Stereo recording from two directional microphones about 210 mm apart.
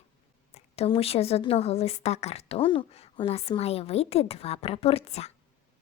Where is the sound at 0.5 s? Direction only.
30° left (ahead or behind).